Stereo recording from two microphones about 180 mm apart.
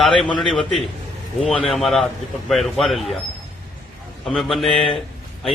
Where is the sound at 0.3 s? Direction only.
Centre (ahead or behind).